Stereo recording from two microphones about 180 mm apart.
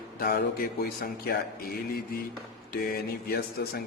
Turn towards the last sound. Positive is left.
turn(degrees=55)  # may be behind; listen again after turning